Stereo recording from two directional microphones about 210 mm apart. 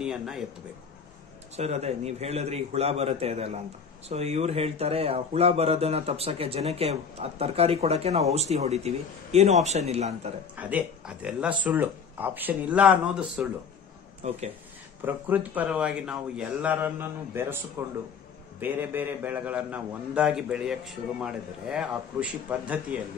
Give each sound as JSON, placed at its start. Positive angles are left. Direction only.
{"t": 0.0, "sound": "speech", "side_deg": 0}
{"t": 1.6, "sound": "a man's voice", "side_deg": -30}
{"t": 10.6, "sound": "speech", "side_deg": -5}
{"t": 14.2, "sound": "a man's voice", "side_deg": -35}
{"t": 15.0, "sound": "a man's voice", "side_deg": -10}